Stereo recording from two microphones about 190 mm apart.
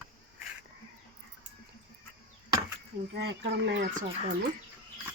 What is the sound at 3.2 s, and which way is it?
Speech, 65° right (ahead or behind).